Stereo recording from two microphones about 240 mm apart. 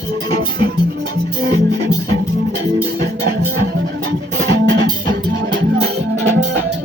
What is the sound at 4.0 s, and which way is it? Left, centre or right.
Music, right.